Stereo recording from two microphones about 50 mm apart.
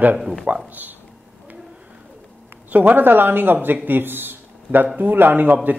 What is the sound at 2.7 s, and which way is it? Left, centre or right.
Speech, right.